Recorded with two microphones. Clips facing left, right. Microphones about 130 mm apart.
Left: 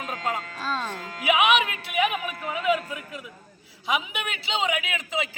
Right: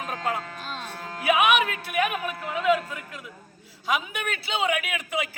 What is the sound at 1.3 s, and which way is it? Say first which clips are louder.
Speech: even; 15° left (ahead or behind).